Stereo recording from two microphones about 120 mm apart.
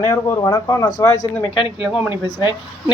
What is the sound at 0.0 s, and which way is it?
Speech, 30° left (ahead or behind).